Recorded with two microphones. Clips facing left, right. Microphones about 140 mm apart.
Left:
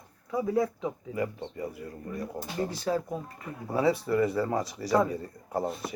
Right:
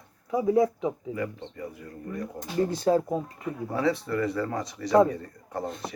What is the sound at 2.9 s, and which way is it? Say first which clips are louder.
Speech: right 7 dB; 30° right (ahead or behind).